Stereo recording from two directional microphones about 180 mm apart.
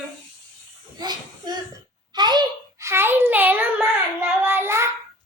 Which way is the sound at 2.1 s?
25° right (ahead or behind).